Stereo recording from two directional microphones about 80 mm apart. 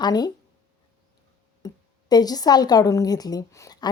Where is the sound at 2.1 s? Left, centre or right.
Left.